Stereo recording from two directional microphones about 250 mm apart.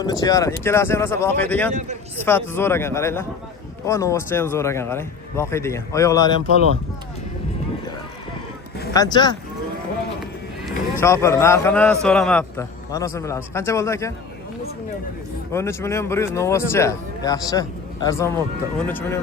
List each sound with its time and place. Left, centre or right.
0.0 s a man's voice: centre
8.9 s a man's voice: centre
11.0 s a man's voice: centre
15.5 s a man's voice: centre